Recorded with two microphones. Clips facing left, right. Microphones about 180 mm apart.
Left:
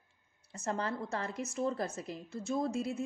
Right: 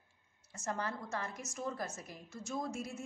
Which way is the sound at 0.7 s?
30° left (ahead or behind).